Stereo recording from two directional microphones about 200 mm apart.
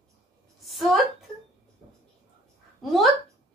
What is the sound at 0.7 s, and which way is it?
Speech, centre (ahead or behind).